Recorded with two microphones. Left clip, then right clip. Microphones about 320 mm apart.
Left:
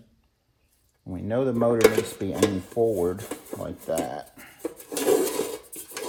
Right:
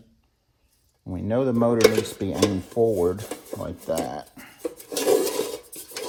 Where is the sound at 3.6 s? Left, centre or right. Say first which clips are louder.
Right 1 dB; centre.